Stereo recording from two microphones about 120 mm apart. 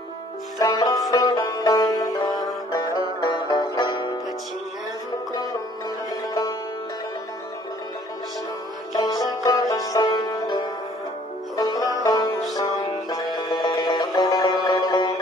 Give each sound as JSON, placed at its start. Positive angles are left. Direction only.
{"t": 0.6, "sound": "music", "side_deg": 35}
{"t": 8.9, "sound": "music", "side_deg": 35}